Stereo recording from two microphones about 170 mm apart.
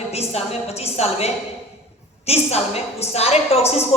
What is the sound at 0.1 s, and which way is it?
A woman's voice, 35° left (ahead or behind).